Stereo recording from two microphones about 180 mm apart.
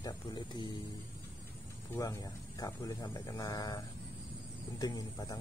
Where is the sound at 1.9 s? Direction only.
20° left (ahead or behind).